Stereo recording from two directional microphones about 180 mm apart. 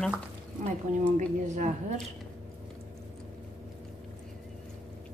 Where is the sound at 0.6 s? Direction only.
40° right (ahead or behind).